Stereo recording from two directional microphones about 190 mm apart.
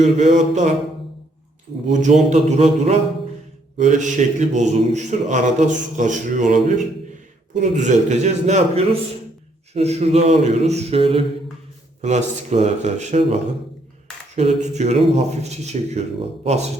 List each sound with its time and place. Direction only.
0.0 s speech: 35° right (ahead or behind)
1.9 s speech: 40° right (ahead or behind)